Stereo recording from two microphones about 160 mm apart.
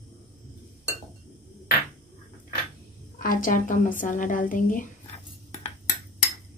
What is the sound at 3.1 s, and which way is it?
A woman's voice, 60° left (ahead or behind).